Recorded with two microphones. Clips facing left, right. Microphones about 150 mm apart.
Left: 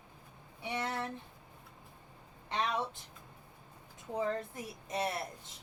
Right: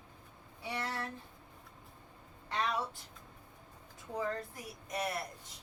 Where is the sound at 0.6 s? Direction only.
20° left (ahead or behind).